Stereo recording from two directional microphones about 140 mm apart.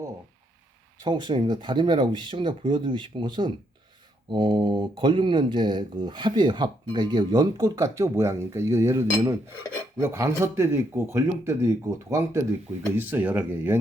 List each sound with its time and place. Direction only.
1.0 s speech: 35° right (ahead or behind); by 13.7 s 15° right (ahead or behind)